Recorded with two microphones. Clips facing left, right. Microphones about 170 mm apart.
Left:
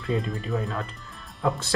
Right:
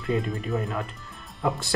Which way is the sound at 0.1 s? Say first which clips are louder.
Right 1 dB; 5° right (ahead or behind).